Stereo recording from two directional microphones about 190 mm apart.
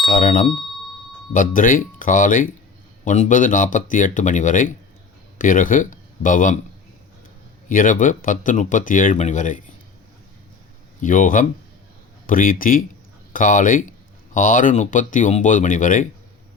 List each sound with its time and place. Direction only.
0.0 s speech: 45° left (ahead or behind)
7.7 s speech: 45° left (ahead or behind)
11.0 s speech: 40° left (ahead or behind)